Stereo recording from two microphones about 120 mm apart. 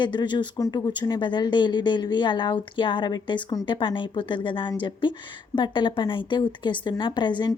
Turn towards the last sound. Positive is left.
turn(degrees=40)  # may be behind; listen again after turning